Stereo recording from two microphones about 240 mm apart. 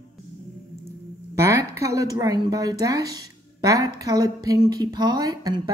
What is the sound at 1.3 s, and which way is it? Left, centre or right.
A woman's voice, centre.